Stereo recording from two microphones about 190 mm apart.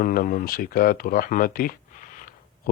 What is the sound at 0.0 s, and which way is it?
Speech, 50° left (ahead or behind).